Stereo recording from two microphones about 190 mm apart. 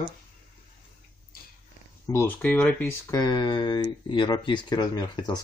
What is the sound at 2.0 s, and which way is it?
Speech, 15° left (ahead or behind).